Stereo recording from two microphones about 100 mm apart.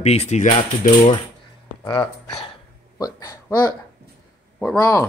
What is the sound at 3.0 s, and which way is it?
Speech, 35° left (ahead or behind).